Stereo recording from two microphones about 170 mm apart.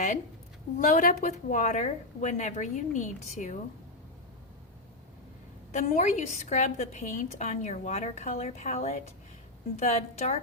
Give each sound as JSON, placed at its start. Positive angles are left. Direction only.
{"t": 0.8, "sound": "a woman's voice", "side_deg": 50}
{"t": 5.7, "sound": "a woman's voice", "side_deg": 45}